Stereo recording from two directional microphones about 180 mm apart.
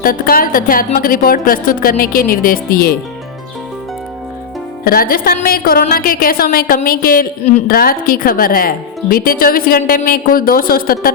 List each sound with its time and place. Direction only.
0.0 s a woman's voice: 55° left (ahead or behind)
4.8 s music: 55° left (ahead or behind)
5.9 s a woman's voice: 55° left (ahead or behind)